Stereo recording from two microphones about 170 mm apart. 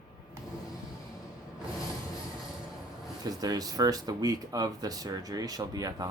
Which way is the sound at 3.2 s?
20° right (ahead or behind).